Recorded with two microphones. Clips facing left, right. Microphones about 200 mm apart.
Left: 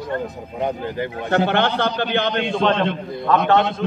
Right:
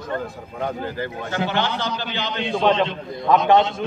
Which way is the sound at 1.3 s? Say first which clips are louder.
Left 6 dB; 60° left (ahead or behind).